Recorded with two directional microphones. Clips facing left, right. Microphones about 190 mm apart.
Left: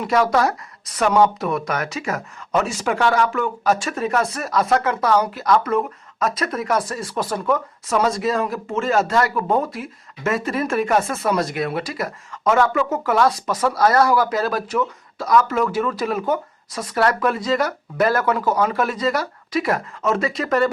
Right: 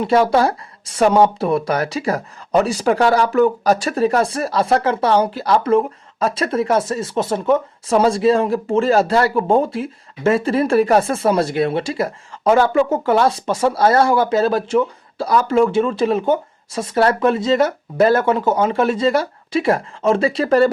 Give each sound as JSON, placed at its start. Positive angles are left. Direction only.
{"t": 0.0, "sound": "speech", "side_deg": -30}